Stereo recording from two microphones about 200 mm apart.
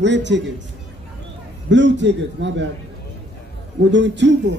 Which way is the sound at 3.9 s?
65° right (ahead or behind).